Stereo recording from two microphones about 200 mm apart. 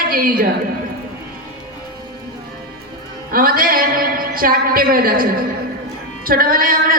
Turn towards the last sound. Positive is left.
turn(degrees=-45)  # may be behind; listen again after turning